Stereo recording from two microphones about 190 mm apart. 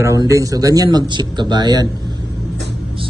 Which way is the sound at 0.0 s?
15° right (ahead or behind).